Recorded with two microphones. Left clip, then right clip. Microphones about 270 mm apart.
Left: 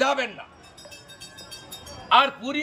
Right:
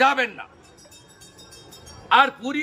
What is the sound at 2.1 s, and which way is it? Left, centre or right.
Speech, centre.